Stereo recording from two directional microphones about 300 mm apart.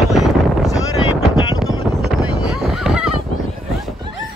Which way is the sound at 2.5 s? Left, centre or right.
Centre.